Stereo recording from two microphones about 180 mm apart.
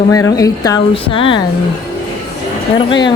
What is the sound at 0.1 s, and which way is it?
Speech, 20° left (ahead or behind).